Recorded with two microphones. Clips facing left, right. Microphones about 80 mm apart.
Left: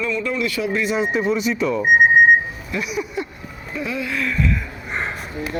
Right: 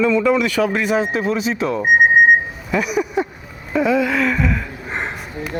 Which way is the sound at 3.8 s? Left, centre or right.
Right.